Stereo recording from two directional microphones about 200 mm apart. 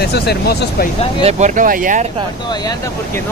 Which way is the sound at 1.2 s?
40° right (ahead or behind).